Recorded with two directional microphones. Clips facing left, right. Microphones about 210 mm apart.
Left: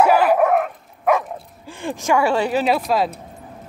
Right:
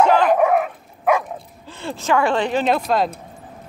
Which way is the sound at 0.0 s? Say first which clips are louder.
Even; 5° left (ahead or behind).